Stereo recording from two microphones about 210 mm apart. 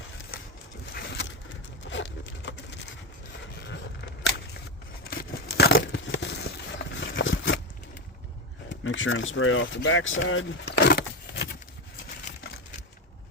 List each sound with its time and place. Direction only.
0.9 s pigeon: 50° left (ahead or behind)
1.9 s a sound: 60° left (ahead or behind)
8.7 s speech: 65° left (ahead or behind)